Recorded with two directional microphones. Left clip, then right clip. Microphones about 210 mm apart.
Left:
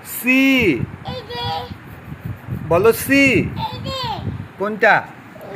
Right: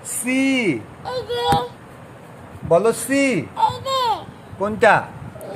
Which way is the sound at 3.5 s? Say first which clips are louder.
Right 7 dB; 20° right (ahead or behind).